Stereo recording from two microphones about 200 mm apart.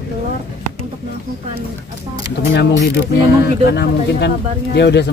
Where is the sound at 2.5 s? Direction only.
55° left (ahead or behind).